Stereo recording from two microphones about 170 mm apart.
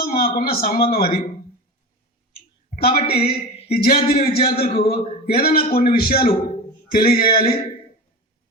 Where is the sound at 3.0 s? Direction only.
35° left (ahead or behind).